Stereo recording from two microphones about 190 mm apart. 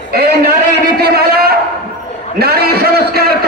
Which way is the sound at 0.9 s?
55° right (ahead or behind).